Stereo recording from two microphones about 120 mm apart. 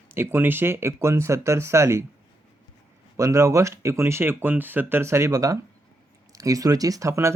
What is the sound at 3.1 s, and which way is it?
Speech, 25° right (ahead or behind).